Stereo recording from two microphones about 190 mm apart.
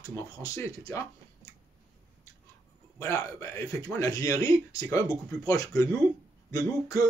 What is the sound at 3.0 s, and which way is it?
Speech, 15° left (ahead or behind).